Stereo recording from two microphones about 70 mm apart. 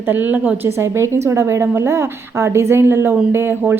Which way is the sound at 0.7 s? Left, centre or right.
Right.